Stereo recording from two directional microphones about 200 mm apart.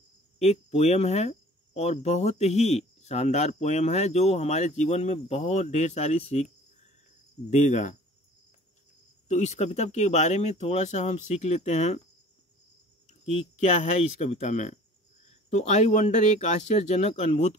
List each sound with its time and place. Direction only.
0.4 s speech: 35° left (ahead or behind)
7.4 s speech: 35° left (ahead or behind)
9.3 s speech: 35° left (ahead or behind)
13.2 s speech: 30° left (ahead or behind)